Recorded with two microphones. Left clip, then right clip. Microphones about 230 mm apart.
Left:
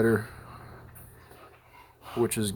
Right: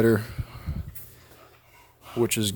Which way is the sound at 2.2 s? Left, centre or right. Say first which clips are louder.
Right 3 dB; right.